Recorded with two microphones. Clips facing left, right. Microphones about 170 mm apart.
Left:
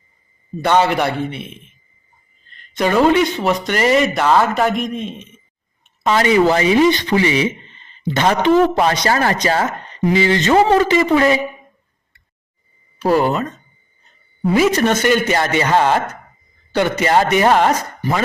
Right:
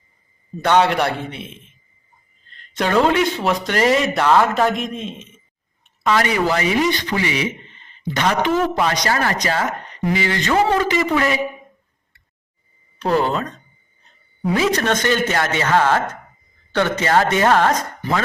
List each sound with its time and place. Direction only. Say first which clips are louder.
0.6 s speech: left 1 dB; centre (ahead or behind)
2.7 s speech: left 3 dB; 5° left (ahead or behind)
6.0 s speech: left 5 dB; 25° left (ahead or behind)
13.0 s speech: left 3 dB; 10° left (ahead or behind)